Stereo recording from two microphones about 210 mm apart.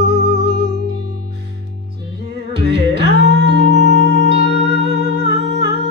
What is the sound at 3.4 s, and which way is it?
Singing bowl, 55° right (ahead or behind).